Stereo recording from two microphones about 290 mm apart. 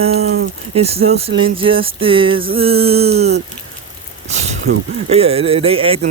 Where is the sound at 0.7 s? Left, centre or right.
Right.